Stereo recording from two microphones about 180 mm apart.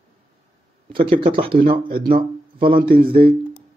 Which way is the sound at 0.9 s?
30° right (ahead or behind).